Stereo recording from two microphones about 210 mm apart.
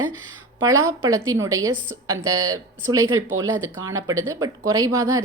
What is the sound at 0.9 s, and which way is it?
A woman's voice, 15° right (ahead or behind).